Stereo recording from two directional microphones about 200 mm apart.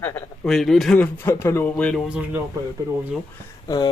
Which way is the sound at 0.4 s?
Centre (ahead or behind).